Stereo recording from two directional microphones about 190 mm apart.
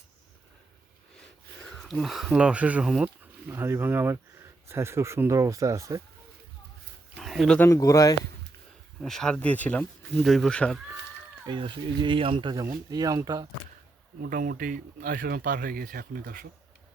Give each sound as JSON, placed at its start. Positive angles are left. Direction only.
{"t": 1.7, "sound": "speech", "side_deg": 0}
{"t": 7.2, "sound": "speech", "side_deg": 0}
{"t": 7.7, "sound": "a man's voice", "side_deg": 15}
{"t": 9.0, "sound": "speech", "side_deg": 0}
{"t": 11.4, "sound": "speech", "side_deg": -25}
{"t": 14.2, "sound": "speech", "side_deg": -50}